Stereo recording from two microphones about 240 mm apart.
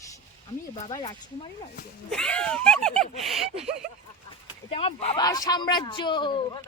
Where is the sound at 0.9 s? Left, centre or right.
Centre.